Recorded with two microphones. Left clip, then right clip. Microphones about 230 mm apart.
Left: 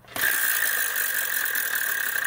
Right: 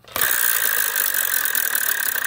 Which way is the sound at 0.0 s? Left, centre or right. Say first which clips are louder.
Right 2 dB; right.